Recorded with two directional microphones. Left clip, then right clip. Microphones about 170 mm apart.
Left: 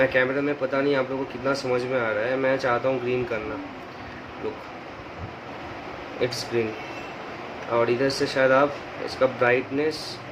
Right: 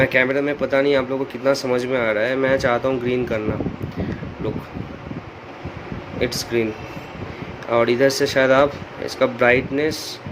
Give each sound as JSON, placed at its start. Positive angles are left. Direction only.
{"t": 0.0, "sound": "speech", "side_deg": -55}
{"t": 6.1, "sound": "speech", "side_deg": -50}
{"t": 7.7, "sound": "speech", "side_deg": -55}